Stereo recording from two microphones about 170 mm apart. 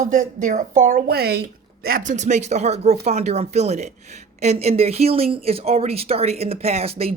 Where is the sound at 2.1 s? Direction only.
45° right (ahead or behind).